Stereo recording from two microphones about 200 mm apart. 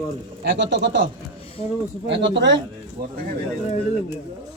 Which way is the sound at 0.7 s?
60° right (ahead or behind).